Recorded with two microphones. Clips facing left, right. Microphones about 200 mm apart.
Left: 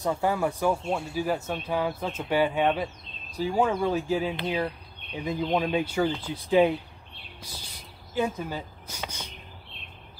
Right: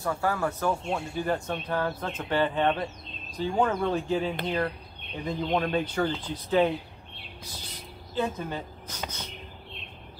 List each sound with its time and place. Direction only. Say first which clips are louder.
0.0 s speech: left 2 dB; 20° left (ahead or behind)